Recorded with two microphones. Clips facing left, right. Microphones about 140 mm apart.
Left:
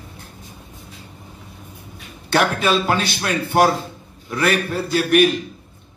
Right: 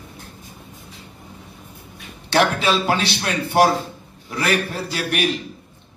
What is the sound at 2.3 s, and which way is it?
A man's voice, 50° left (ahead or behind).